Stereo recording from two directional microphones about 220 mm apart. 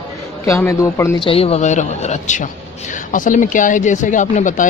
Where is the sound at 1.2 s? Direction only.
25° left (ahead or behind).